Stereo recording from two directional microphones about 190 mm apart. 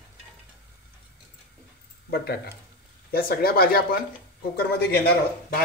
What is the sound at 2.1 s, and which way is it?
A man's voice, 55° left (ahead or behind).